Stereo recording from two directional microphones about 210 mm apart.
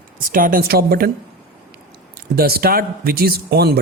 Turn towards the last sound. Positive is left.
turn(degrees=-50)  # may be behind; listen again after turning